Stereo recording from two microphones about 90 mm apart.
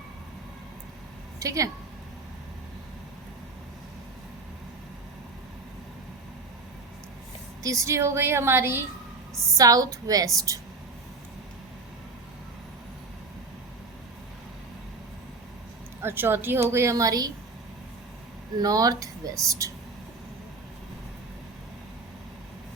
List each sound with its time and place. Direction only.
1.4 s a woman's voice: 35° right (ahead or behind)
7.6 s a woman's voice: 35° right (ahead or behind)
9.6 s speech: 40° right (ahead or behind)
16.0 s a woman's voice: 25° right (ahead or behind); by 17.3 s 45° right (ahead or behind)
18.5 s speech: 45° right (ahead or behind)